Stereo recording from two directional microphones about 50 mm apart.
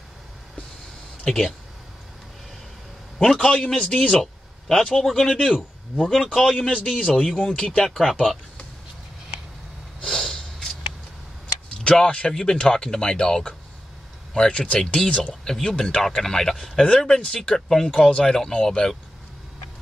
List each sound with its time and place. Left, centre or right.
1.2 s speech: centre
3.4 s speech: centre
4.2 s a sound: centre
5.0 s a man's voice: centre
6.7 s speech: centre
10.0 s snort: centre
11.9 s speech: centre
15.4 s speech: centre